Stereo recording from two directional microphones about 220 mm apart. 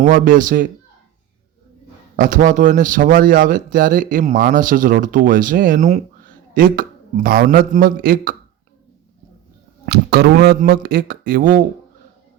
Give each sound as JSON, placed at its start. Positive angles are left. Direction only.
{"t": 0.0, "sound": "speech", "side_deg": -35}
{"t": 2.1, "sound": "speech", "side_deg": -35}
{"t": 9.8, "sound": "speech", "side_deg": -45}